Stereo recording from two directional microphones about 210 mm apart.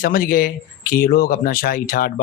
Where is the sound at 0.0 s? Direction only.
45° left (ahead or behind).